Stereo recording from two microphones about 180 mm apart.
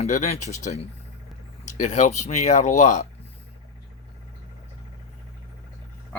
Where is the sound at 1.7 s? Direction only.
40° left (ahead or behind).